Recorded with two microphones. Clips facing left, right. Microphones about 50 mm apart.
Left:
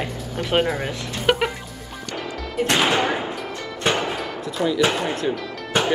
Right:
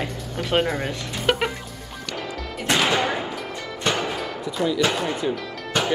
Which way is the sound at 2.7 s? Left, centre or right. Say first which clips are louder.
Even; centre.